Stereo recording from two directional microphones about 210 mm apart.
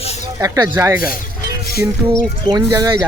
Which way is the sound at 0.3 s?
15° right (ahead or behind).